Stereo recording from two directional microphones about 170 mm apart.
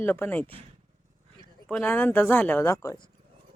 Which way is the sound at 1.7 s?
10° left (ahead or behind).